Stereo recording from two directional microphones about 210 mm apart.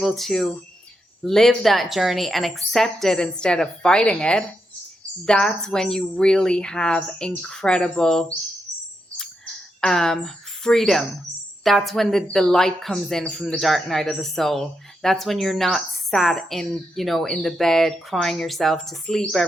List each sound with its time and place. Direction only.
0.0 s a woman's voice: centre (ahead or behind)
9.1 s a sound: 5° left (ahead or behind)
11.6 s a woman's voice: centre (ahead or behind)